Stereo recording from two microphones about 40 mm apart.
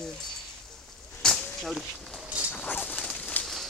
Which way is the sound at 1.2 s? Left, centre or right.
Centre.